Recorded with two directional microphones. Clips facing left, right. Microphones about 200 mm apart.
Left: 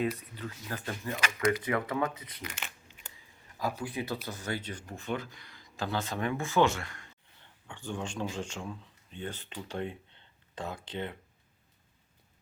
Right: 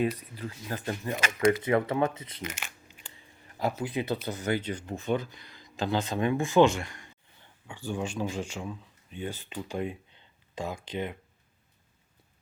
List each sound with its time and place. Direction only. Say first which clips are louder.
0.0 s speech: right 3 dB; 35° right (ahead or behind)
0.7 s speech: right 4 dB; 20° right (ahead or behind)
3.7 s speech: right 5 dB; 20° right (ahead or behind)